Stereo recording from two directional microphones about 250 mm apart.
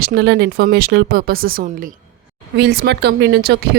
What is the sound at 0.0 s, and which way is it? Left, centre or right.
Speech, right.